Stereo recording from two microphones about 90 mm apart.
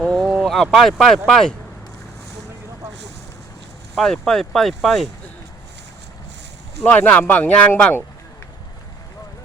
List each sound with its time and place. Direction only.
0.0 s a sound: 5° left (ahead or behind)
0.3 s speech: centre (ahead or behind)
3.9 s speech: centre (ahead or behind)
6.8 s speech: 20° left (ahead or behind)